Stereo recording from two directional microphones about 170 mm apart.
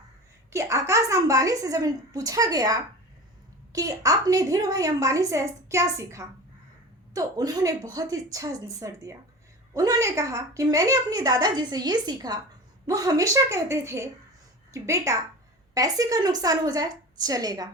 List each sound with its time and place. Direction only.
0.5 s a woman's voice: 20° right (ahead or behind)